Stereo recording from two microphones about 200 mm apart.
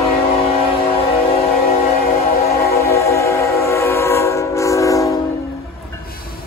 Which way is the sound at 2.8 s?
15° left (ahead or behind).